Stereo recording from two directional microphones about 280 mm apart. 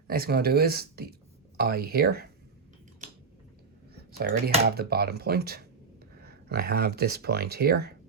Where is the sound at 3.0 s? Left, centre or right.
Right.